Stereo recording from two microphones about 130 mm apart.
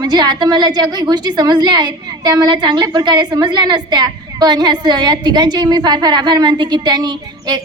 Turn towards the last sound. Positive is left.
turn(degrees=-30)  # may be behind; listen again after turning